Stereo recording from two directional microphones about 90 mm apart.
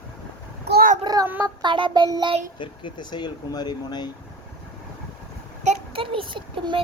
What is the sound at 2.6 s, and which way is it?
Speech, 60° left (ahead or behind).